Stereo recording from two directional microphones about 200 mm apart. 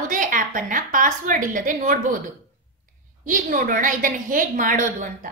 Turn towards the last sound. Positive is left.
turn(degrees=-40)  # may be behind; listen again after turning